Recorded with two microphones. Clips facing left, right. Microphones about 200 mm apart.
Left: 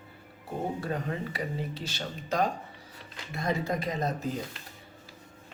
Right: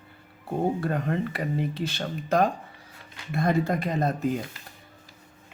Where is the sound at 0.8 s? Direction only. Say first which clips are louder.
Right 5 dB; 60° right (ahead or behind).